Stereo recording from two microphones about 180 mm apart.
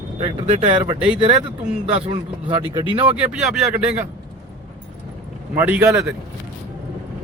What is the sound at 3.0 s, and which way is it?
Speech, 5° right (ahead or behind).